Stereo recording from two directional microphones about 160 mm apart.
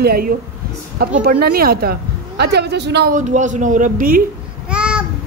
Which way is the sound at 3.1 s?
50° right (ahead or behind).